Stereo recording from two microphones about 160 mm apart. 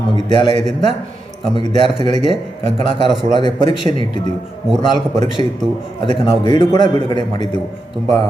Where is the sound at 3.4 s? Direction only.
30° left (ahead or behind).